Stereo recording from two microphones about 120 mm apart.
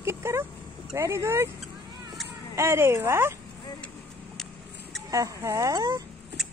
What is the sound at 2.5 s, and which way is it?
Speech, 20° right (ahead or behind).